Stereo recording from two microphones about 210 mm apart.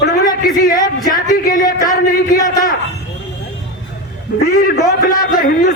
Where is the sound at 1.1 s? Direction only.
40° left (ahead or behind).